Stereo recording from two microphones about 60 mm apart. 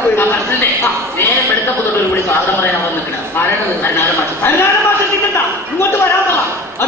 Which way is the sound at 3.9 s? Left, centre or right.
Left.